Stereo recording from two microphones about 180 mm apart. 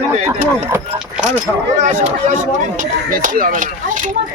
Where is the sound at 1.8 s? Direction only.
40° right (ahead or behind).